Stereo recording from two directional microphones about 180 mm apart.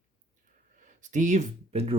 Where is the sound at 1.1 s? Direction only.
45° right (ahead or behind).